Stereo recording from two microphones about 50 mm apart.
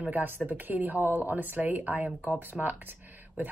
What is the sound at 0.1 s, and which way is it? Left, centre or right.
A woman's voice, right.